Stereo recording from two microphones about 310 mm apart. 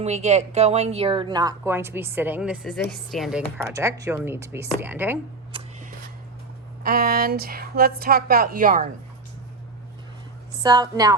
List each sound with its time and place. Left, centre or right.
0.0 s speech: right
6.8 s a woman's voice: right
10.6 s speech: centre